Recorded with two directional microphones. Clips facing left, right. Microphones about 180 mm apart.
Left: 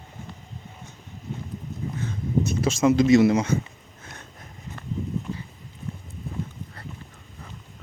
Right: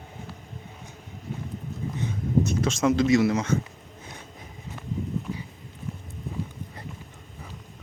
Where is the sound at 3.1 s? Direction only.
20° left (ahead or behind).